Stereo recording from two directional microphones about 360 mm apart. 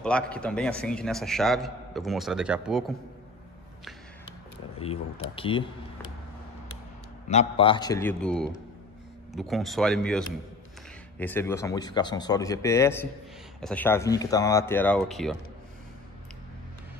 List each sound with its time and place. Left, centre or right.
0.0 s a man's voice: centre
4.7 s speech: centre
7.2 s a man's voice: centre